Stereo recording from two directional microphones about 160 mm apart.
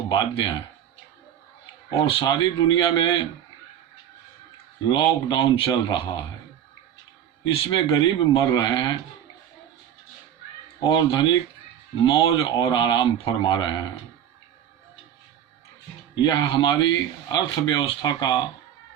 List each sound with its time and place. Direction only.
0.1 s speech: 30° left (ahead or behind)
2.0 s speech: 30° left (ahead or behind)
4.9 s speech: 30° left (ahead or behind)
7.5 s speech: 30° left (ahead or behind)
10.8 s speech: 30° left (ahead or behind)
16.1 s speech: 30° left (ahead or behind)